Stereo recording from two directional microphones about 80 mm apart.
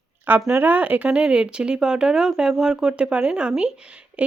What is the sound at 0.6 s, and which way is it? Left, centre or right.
Speech, right.